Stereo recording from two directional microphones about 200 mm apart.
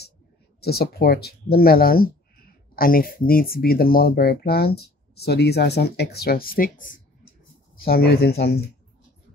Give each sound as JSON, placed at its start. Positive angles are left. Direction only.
{"t": 0.6, "sound": "speech", "side_deg": 50}